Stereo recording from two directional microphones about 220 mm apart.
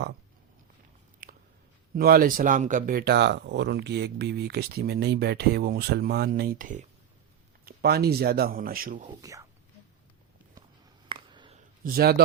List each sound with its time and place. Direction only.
1.2 s chewing: 40° right (ahead or behind)
2.0 s speech: 40° right (ahead or behind)
9.0 s speech: 15° right (ahead or behind)
11.1 s a sound: 20° right (ahead or behind)
11.8 s speech: 40° right (ahead or behind)